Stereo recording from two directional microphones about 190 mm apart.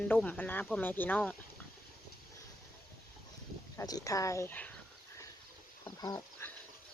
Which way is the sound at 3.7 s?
20° left (ahead or behind).